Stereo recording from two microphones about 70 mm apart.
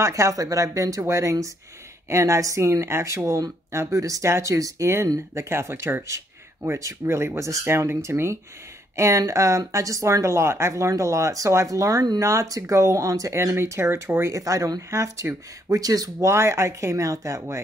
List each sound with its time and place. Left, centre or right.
0.0 s speech: right
14.3 s speech: right
16.3 s speech: right